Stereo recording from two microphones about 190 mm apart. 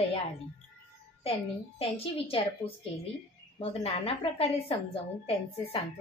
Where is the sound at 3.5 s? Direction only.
30° left (ahead or behind).